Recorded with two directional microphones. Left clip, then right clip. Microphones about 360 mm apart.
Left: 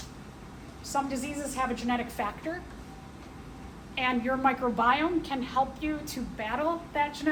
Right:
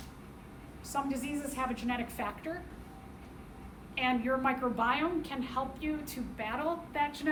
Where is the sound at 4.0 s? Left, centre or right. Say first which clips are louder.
Left 3 dB; centre.